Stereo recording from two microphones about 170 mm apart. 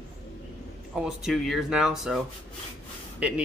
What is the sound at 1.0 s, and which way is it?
Speech, centre (ahead or behind).